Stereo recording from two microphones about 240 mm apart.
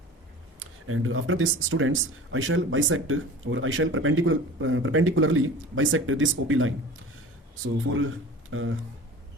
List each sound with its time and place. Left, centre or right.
0.6 s speech: right